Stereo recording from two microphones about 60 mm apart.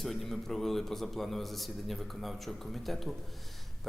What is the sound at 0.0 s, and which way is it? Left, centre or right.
Speech, centre.